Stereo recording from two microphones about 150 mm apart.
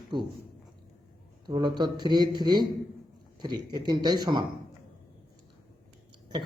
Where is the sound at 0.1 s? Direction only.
30° right (ahead or behind).